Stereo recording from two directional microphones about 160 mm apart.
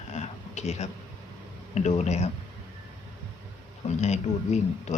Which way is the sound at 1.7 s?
45° left (ahead or behind).